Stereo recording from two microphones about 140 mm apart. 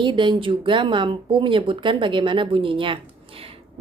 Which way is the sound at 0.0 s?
35° right (ahead or behind).